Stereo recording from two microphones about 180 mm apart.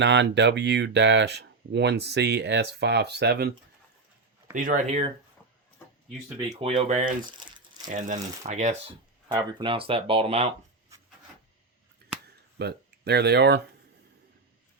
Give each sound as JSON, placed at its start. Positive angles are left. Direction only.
{"t": 0.0, "sound": "speech", "side_deg": -75}
{"t": 4.5, "sound": "speech", "side_deg": -45}
{"t": 6.6, "sound": "speech", "side_deg": -35}
{"t": 7.3, "sound": "crumpling", "side_deg": -25}
{"t": 7.9, "sound": "speech", "side_deg": -45}
{"t": 9.3, "sound": "speech", "side_deg": -25}
{"t": 10.9, "sound": "rub", "side_deg": -15}
{"t": 12.5, "sound": "speech", "side_deg": -65}